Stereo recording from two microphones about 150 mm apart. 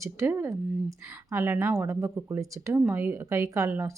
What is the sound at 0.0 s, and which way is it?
Speech, 20° right (ahead or behind).